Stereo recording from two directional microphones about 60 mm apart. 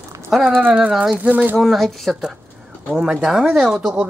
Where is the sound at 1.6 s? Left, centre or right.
Centre.